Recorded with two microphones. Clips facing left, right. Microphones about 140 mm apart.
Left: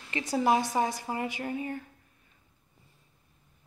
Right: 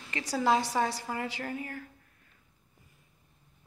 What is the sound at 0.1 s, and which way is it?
A woman's voice, 20° left (ahead or behind).